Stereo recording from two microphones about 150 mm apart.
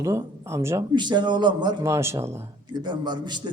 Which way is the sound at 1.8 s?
20° right (ahead or behind).